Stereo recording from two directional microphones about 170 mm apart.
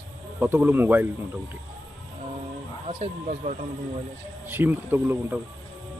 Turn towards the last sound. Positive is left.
turn(degrees=-10)  # may be behind; listen again after turning